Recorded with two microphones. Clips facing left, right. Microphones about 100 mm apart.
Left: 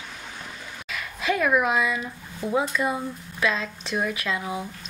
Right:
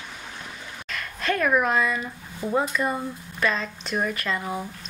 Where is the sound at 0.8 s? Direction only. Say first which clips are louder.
Left 1 dB; 5° left (ahead or behind).